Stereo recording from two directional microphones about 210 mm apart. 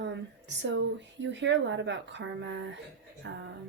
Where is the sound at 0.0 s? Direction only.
60° right (ahead or behind).